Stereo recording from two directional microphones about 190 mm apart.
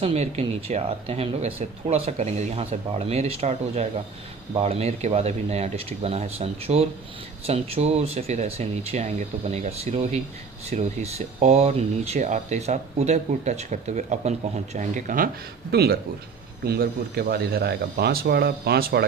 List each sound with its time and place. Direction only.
0.0 s speech: 35° right (ahead or behind)
15.7 s speech: 55° right (ahead or behind)